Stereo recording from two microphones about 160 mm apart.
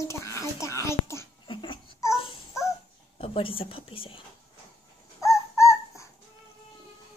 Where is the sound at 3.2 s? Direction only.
35° left (ahead or behind).